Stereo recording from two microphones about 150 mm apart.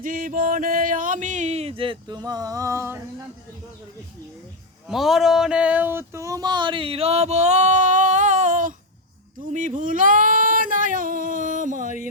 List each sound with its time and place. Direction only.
0.0 s a sound: 70° right (ahead or behind); by 3.0 s 15° right (ahead or behind)
4.9 s speech: centre (ahead or behind); by 8.7 s 55° right (ahead or behind)
9.5 s female singing: 60° right (ahead or behind)